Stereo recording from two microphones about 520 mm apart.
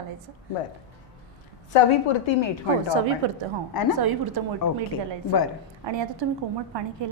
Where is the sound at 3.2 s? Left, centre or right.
Right.